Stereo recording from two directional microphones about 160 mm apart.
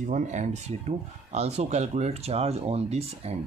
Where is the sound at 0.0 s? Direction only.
50° right (ahead or behind).